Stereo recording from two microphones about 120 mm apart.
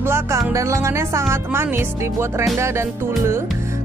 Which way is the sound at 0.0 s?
20° right (ahead or behind).